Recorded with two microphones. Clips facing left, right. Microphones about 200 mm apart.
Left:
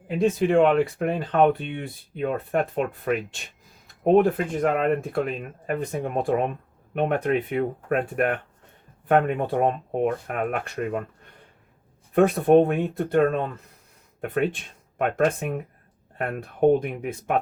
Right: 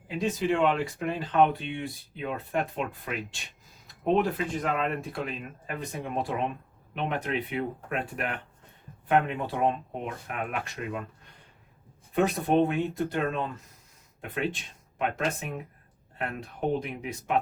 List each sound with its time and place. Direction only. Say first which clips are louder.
0.2 s speech: left 7 dB; 55° left (ahead or behind)
12.1 s speech: left 7 dB; 55° left (ahead or behind)